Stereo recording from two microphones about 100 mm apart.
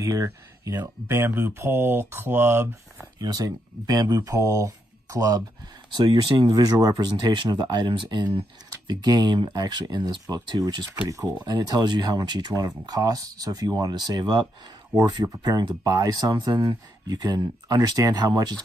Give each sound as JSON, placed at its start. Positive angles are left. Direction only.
{"t": 0.0, "sound": "speech", "side_deg": -30}
{"t": 3.2, "sound": "speech", "side_deg": -40}
{"t": 5.9, "sound": "speech", "side_deg": -45}
{"t": 16.3, "sound": "speech", "side_deg": -45}